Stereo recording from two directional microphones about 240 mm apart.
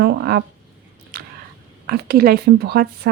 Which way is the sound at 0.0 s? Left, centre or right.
Right.